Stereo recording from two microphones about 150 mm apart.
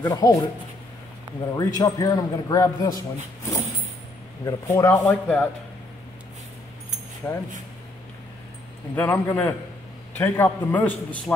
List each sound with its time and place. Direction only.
0.0 s a man's voice: 25° left (ahead or behind)
1.6 s a man's voice: 25° left (ahead or behind)
4.5 s a man's voice: 20° left (ahead or behind)
7.2 s a man's voice: 15° left (ahead or behind)
8.9 s a man's voice: 15° left (ahead or behind)